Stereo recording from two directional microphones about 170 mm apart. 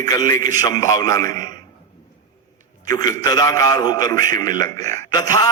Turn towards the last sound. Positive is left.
turn(degrees=20)  # may be behind; listen again after turning